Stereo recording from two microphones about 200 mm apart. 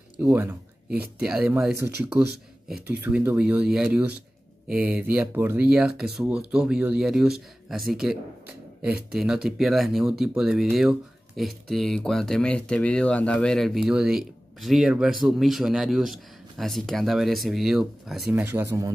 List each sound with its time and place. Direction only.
0.2 s speech: 10° right (ahead or behind)
18.4 s speech: 10° right (ahead or behind)